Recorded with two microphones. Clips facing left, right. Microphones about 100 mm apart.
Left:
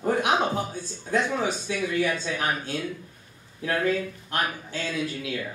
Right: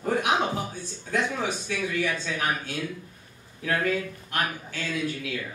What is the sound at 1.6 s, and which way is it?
Speech, 20° left (ahead or behind).